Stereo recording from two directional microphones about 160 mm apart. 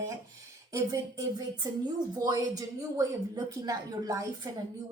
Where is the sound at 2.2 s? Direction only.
20° right (ahead or behind).